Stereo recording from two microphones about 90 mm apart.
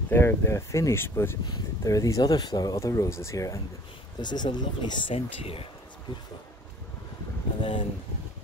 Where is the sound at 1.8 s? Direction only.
40° left (ahead or behind).